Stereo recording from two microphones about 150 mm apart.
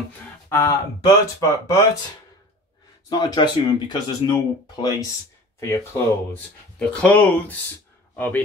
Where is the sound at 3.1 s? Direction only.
25° left (ahead or behind).